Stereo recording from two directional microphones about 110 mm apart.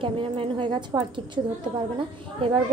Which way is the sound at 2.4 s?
50° right (ahead or behind).